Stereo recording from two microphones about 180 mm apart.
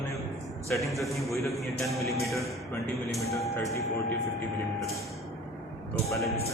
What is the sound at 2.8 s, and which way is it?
Speech, 15° left (ahead or behind).